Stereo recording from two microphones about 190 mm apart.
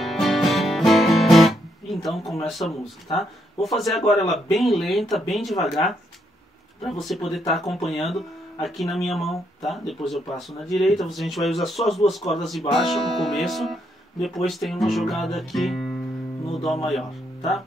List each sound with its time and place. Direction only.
0.0 s music: centre (ahead or behind)